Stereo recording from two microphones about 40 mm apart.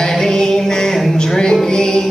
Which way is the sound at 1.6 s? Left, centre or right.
Centre.